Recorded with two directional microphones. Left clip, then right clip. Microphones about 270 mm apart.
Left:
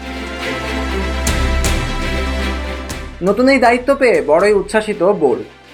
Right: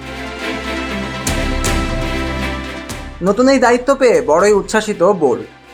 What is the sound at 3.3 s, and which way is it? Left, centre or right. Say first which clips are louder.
Speech: even; centre.